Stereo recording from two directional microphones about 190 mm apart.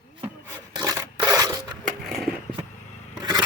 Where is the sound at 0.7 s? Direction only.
20° right (ahead or behind).